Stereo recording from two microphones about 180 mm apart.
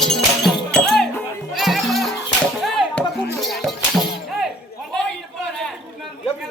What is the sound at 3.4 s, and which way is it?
Music, centre (ahead or behind).